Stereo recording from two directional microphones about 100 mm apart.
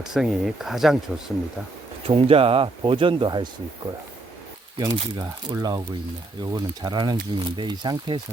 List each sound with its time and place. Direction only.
0.0 s speech: 5° right (ahead or behind)
2.0 s speech: 70° right (ahead or behind); by 3.5 s 50° right (ahead or behind)
4.8 s speech: 40° right (ahead or behind)